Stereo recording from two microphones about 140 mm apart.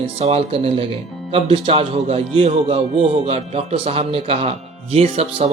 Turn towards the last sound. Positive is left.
turn(degrees=-45)  # may be behind; listen again after turning